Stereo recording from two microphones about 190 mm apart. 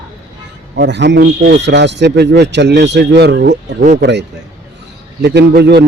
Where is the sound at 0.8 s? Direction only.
65° right (ahead or behind).